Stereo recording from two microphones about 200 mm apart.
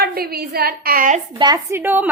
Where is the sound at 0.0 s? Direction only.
50° right (ahead or behind).